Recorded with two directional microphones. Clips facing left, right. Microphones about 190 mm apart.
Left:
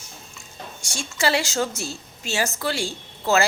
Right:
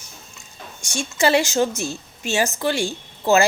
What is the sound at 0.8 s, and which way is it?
A woman's voice, 20° right (ahead or behind).